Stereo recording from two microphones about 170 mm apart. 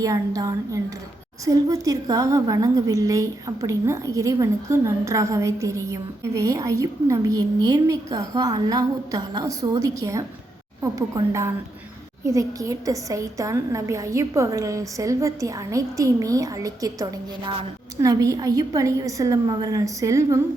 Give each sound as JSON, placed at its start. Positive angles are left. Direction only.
{"t": 0.0, "sound": "a woman's voice", "side_deg": -20}